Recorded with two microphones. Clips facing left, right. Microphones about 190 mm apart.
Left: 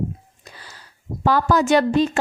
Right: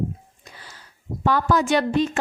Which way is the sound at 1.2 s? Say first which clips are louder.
Left 3 dB; 35° left (ahead or behind).